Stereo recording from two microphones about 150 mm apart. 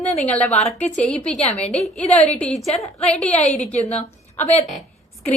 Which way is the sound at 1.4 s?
45° left (ahead or behind).